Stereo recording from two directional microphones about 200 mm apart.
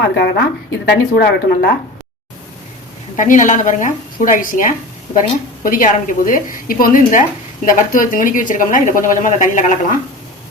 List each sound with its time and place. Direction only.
0.0 s speech: 55° left (ahead or behind)
3.2 s a woman's voice: 40° left (ahead or behind)